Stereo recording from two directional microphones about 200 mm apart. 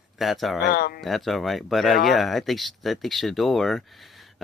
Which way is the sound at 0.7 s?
50° left (ahead or behind).